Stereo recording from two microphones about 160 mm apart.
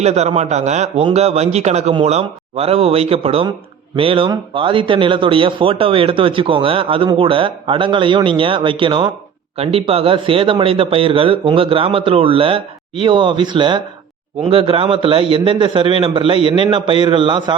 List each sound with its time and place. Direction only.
0.0 s a man's voice: 45° right (ahead or behind)